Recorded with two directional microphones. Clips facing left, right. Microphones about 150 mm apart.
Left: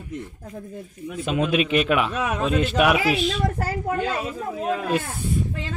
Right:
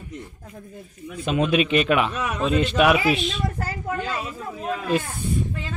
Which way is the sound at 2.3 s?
55° left (ahead or behind).